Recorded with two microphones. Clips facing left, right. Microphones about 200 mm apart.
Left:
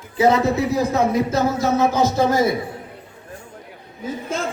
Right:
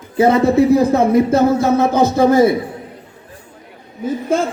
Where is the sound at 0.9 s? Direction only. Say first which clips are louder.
Right 6 dB; 55° right (ahead or behind).